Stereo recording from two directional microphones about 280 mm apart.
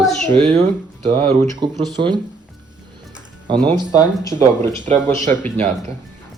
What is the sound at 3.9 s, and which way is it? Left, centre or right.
Speech, centre.